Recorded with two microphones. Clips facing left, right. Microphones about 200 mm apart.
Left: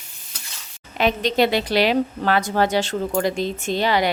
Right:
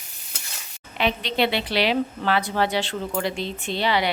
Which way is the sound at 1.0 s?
45° left (ahead or behind).